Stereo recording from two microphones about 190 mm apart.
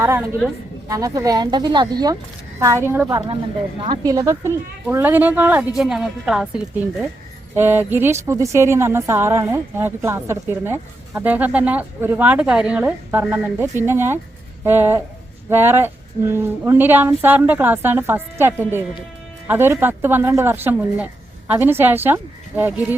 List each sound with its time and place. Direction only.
0.0 s speech: 15° right (ahead or behind)
3.8 s speech: 25° right (ahead or behind); by 23.0 s 10° right (ahead or behind)